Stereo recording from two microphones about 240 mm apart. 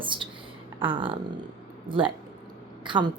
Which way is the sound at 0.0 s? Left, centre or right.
Right.